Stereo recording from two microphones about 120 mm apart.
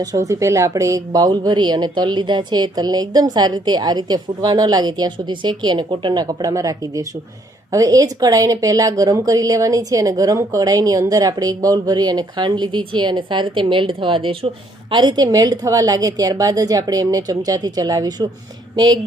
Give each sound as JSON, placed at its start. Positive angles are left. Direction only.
{"t": 0.0, "sound": "a woman's voice", "side_deg": -30}